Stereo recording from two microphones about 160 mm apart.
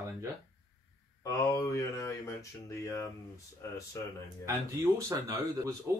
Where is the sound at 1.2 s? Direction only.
20° left (ahead or behind).